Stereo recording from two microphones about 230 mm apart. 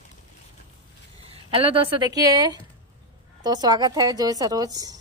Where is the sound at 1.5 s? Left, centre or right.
Right.